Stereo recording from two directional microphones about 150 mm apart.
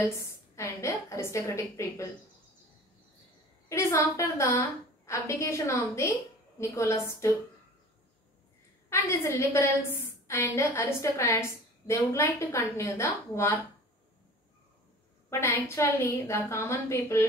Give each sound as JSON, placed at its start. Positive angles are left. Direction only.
{"t": 0.6, "sound": "a woman's voice", "side_deg": 15}
{"t": 3.6, "sound": "a woman's voice", "side_deg": 20}
{"t": 8.9, "sound": "a woman's voice", "side_deg": 15}
{"t": 15.2, "sound": "a woman's voice", "side_deg": 15}